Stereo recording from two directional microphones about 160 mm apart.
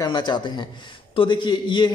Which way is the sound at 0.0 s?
30° left (ahead or behind).